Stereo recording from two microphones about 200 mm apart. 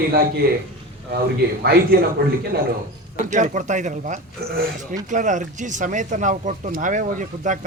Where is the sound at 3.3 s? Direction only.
40° right (ahead or behind).